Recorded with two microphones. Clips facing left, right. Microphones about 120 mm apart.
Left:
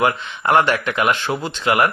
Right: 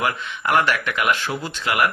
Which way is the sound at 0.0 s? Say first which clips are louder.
Left 5 dB; 30° left (ahead or behind).